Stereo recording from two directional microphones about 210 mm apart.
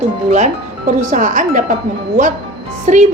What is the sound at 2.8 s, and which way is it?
Speech, 35° right (ahead or behind).